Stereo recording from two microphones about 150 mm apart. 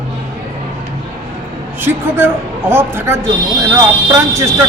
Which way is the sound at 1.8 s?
15° right (ahead or behind).